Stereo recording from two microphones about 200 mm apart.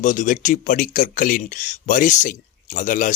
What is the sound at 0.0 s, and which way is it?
Speech, 40° left (ahead or behind).